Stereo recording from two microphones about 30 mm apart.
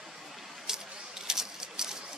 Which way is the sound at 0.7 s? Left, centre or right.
Centre.